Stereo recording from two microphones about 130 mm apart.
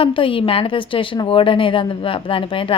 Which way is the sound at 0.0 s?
40° left (ahead or behind).